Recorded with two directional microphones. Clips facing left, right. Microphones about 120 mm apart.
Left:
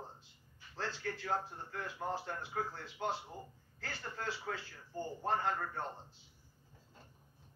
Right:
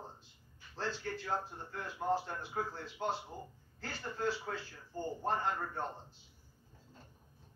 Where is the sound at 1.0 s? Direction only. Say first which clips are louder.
Even; 25° right (ahead or behind).